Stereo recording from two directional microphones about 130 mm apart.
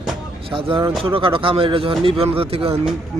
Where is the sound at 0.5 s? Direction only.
40° right (ahead or behind).